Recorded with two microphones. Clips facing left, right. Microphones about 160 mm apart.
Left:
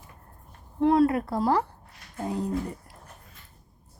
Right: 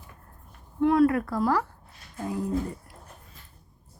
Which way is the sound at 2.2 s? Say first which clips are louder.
Left 1 dB; 35° left (ahead or behind).